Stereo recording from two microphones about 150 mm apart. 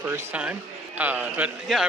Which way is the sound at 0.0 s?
10° right (ahead or behind).